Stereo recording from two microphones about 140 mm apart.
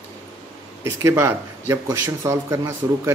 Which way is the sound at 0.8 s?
20° right (ahead or behind).